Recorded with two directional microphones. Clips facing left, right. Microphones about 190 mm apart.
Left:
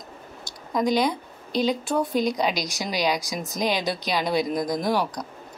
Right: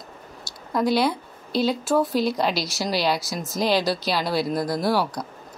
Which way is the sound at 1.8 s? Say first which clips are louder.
Right 4 dB; centre (ahead or behind).